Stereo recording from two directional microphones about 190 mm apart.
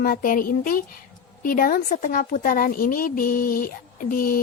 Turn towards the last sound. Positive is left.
turn(degrees=50)  # may be behind; listen again after turning